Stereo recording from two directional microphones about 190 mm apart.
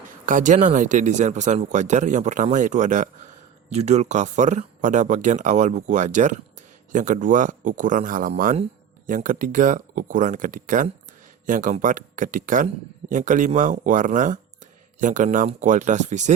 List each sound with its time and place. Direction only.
0.3 s speech: 40° right (ahead or behind)